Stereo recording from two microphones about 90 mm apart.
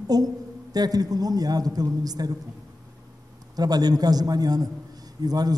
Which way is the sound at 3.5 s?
45° right (ahead or behind).